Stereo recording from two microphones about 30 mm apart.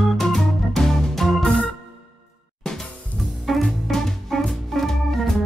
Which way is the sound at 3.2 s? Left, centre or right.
Centre.